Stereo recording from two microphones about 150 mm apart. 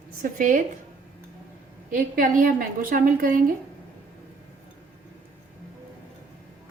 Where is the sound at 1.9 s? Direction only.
70° right (ahead or behind).